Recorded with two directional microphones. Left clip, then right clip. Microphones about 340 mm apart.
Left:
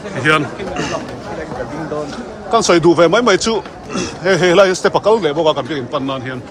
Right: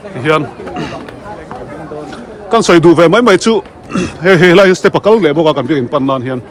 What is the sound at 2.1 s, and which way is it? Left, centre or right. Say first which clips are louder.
A man's voice: right 5 dB; right.